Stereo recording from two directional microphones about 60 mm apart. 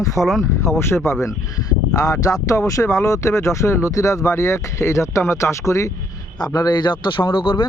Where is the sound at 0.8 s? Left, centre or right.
Left.